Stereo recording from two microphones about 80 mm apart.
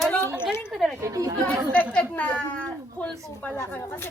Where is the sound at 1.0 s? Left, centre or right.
Right.